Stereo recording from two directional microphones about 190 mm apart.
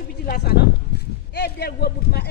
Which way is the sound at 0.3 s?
50° left (ahead or behind).